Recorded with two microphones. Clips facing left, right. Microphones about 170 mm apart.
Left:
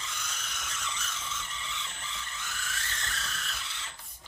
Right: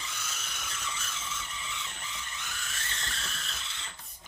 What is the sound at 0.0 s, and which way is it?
Vehicle, 10° right (ahead or behind).